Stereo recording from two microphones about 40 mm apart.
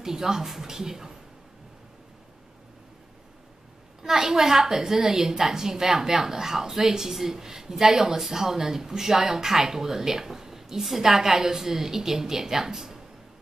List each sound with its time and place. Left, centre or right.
0.0 s a woman's voice: centre
4.0 s a woman's voice: centre